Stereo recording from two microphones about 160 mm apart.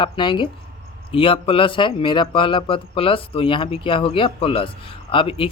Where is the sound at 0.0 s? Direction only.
30° left (ahead or behind).